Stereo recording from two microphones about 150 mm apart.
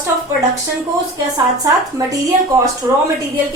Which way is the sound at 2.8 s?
15° right (ahead or behind).